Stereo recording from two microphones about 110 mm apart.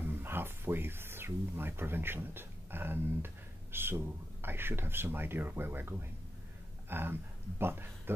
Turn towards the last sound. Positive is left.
turn(degrees=-20)  # may be behind; listen again after turning